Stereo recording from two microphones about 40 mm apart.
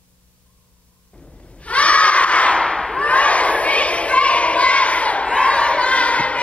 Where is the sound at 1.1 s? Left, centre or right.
Left.